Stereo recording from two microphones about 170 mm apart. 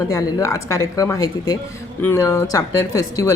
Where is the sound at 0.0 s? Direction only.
20° left (ahead or behind).